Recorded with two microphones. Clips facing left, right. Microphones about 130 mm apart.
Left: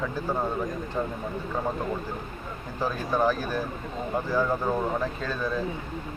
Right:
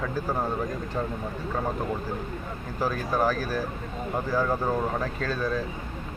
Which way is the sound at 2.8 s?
5° right (ahead or behind).